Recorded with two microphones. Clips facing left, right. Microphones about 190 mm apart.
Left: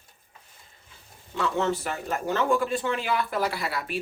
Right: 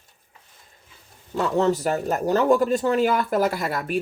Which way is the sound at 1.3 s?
40° right (ahead or behind).